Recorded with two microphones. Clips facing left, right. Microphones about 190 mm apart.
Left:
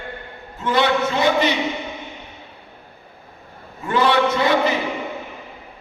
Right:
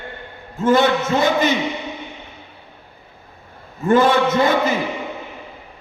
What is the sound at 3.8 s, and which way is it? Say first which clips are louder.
Speech: right 3 dB; 45° right (ahead or behind).